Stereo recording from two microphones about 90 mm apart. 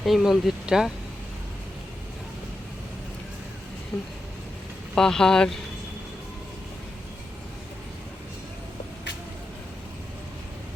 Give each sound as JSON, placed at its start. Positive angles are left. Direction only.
{"t": 0.0, "sound": "speech", "side_deg": 0}
{"t": 3.9, "sound": "speech", "side_deg": 15}